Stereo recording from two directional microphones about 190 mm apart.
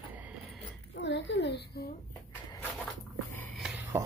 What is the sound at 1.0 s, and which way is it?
Speech, 65° left (ahead or behind).